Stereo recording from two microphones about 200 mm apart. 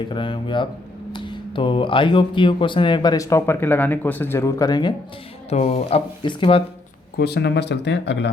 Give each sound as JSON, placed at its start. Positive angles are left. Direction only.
{"t": 0.1, "sound": "speech", "side_deg": 25}
{"t": 5.5, "sound": "speech", "side_deg": 35}
{"t": 7.2, "sound": "speech", "side_deg": 55}